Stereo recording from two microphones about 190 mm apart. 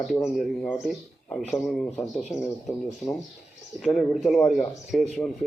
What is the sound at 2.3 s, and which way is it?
Speech, 15° left (ahead or behind).